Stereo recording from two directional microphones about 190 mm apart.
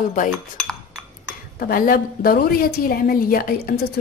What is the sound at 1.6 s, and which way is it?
Speech, 50° left (ahead or behind).